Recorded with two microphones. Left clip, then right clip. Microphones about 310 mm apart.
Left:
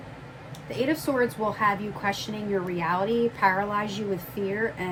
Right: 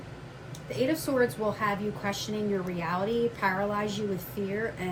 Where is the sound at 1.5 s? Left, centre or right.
Left.